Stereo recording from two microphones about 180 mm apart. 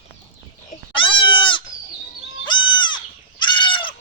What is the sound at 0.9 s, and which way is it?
Goat, 30° left (ahead or behind).